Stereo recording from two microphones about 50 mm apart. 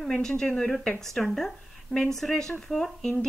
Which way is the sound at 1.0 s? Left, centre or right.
Centre.